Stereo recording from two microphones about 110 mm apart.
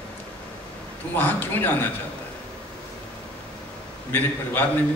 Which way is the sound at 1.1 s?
15° left (ahead or behind).